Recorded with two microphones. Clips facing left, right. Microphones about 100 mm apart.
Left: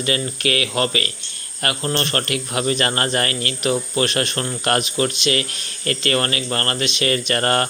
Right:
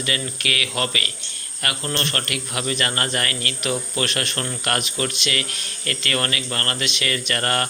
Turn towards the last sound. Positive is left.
turn(degrees=30)  # may be behind; listen again after turning